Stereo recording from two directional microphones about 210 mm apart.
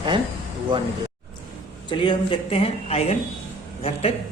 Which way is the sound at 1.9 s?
25° left (ahead or behind).